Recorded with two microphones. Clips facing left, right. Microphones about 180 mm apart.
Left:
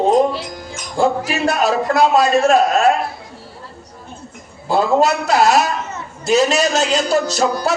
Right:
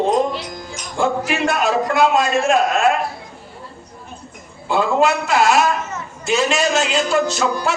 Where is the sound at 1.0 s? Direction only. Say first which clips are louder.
Left 2 dB; 35° left (ahead or behind).